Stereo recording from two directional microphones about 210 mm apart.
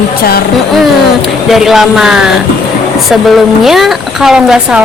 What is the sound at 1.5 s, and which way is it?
Speech, centre (ahead or behind).